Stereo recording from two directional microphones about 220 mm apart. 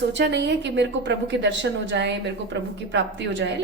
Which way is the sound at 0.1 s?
50° right (ahead or behind).